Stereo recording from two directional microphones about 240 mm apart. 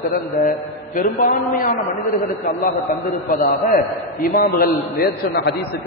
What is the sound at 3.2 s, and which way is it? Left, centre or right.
A man's voice, left.